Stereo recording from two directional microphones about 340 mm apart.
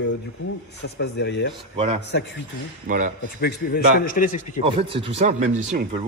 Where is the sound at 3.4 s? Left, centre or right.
Left.